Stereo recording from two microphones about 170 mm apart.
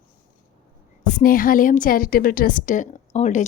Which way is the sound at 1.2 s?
55° left (ahead or behind).